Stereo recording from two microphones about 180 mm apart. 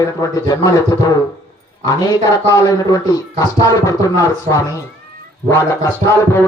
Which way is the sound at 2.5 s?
20° left (ahead or behind).